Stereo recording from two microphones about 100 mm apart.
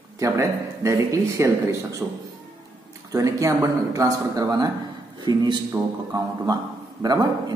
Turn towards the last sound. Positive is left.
turn(degrees=-40)  # may be behind; listen again after turning